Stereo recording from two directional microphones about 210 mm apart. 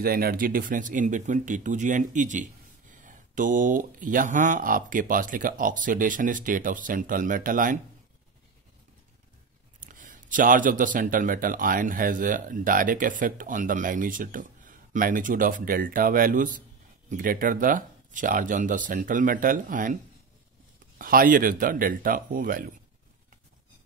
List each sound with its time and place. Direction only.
0.0 s speech: 45° right (ahead or behind)
9.8 s speech: 40° right (ahead or behind)
21.0 s speech: 40° right (ahead or behind)